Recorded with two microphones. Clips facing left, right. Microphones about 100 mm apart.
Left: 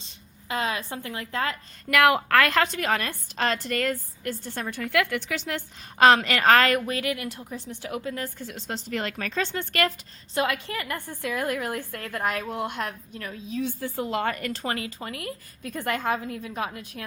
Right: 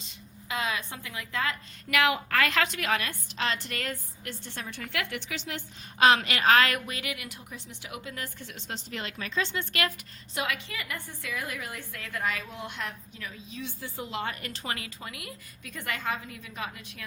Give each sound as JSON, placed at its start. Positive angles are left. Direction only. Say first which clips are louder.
{"t": 0.0, "sound": "a woman's voice", "louder": "right 3 dB", "side_deg": 35}
{"t": 2.0, "sound": "a woman's voice", "louder": "left 6 dB", "side_deg": 60}
{"t": 2.5, "sound": "a woman's voice", "louder": "left 4 dB", "side_deg": 40}